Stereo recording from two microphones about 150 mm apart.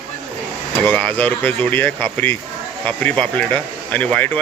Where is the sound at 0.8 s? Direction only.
10° left (ahead or behind).